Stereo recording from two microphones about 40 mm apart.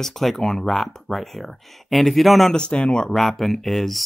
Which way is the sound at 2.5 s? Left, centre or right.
Left.